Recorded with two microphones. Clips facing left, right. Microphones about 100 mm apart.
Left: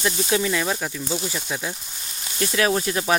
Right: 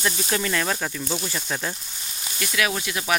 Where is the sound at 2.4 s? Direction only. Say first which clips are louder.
Left 4 dB; 30° left (ahead or behind).